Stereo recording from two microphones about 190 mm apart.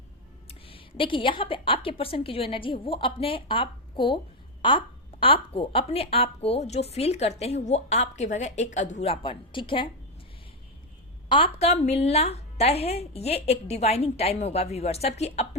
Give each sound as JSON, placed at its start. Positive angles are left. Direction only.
{"t": 0.4, "sound": "a woman's voice", "side_deg": 30}
{"t": 11.3, "sound": "a woman's voice", "side_deg": 30}